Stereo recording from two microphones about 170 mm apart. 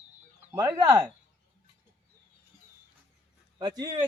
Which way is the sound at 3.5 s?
25° right (ahead or behind).